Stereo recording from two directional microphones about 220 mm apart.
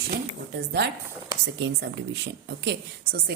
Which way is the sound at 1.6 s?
55° right (ahead or behind).